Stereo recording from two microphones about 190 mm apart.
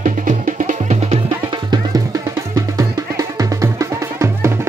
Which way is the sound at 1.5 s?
20° right (ahead or behind).